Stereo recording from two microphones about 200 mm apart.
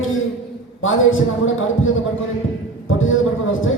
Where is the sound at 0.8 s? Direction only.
80° left.